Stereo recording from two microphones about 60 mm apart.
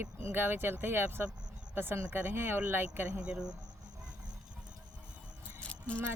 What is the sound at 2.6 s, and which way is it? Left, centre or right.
Speech, right.